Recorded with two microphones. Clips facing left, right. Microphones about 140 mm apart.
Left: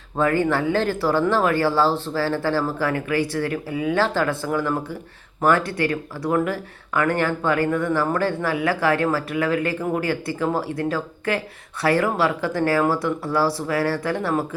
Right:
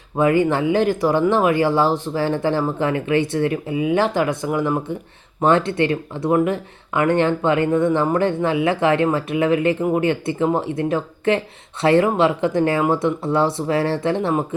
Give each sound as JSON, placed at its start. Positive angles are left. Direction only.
{"t": 0.2, "sound": "speech", "side_deg": -15}